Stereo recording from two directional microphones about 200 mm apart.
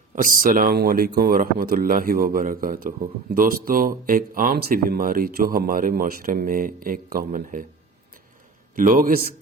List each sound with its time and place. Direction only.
0.2 s speech: 45° right (ahead or behind)
8.7 s speech: 45° right (ahead or behind)